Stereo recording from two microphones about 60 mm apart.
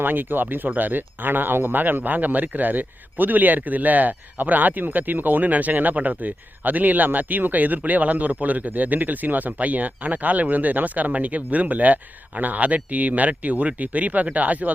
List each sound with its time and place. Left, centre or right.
0.0 s speech: right